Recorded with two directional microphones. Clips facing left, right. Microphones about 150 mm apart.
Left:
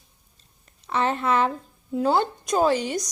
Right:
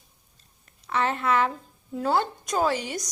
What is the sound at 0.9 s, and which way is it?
A woman's voice, 25° left (ahead or behind).